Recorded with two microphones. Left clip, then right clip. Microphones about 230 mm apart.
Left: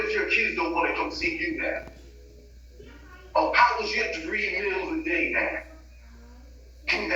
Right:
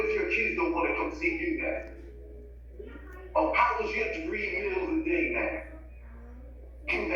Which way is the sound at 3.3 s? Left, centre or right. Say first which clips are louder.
Left 4 dB; centre.